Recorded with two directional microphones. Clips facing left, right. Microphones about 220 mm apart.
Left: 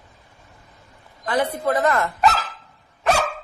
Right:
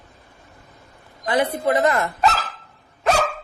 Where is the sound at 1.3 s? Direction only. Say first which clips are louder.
Right 2 dB; 20° right (ahead or behind).